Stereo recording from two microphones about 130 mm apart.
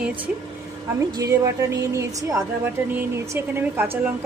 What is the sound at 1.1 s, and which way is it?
A woman's voice, 30° right (ahead or behind).